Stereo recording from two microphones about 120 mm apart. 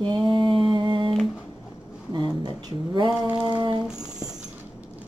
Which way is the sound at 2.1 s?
40° right (ahead or behind).